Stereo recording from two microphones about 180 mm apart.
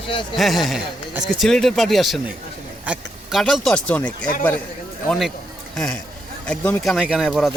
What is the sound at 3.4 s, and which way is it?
Speech, 5° left (ahead or behind).